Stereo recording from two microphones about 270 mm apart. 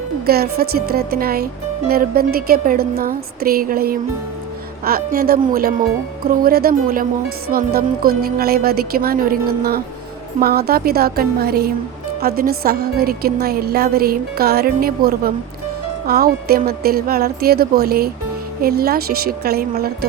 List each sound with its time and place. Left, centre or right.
0.3 s a woman's voice: right